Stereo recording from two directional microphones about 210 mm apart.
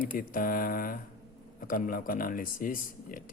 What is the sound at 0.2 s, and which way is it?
Speech, 40° left (ahead or behind).